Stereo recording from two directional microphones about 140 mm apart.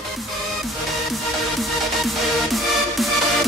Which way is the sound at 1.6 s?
Centre (ahead or behind).